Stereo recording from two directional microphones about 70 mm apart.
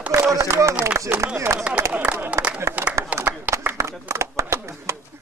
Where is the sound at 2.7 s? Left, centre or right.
Right.